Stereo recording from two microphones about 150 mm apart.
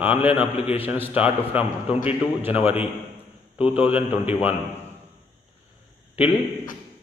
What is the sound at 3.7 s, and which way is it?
Speech, 10° right (ahead or behind).